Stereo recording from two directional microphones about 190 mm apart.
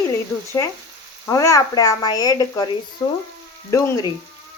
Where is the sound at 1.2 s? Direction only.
15° left (ahead or behind).